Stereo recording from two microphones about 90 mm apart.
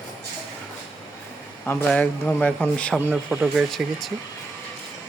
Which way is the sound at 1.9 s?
15° left (ahead or behind).